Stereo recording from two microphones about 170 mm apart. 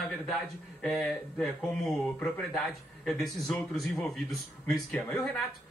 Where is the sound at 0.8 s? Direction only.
Centre (ahead or behind).